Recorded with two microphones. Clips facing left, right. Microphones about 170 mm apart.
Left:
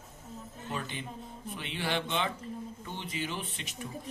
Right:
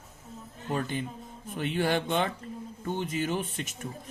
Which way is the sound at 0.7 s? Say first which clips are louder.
Right 7 dB; 45° right (ahead or behind).